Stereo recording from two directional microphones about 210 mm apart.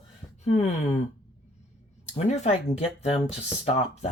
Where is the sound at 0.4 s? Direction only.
30° left (ahead or behind).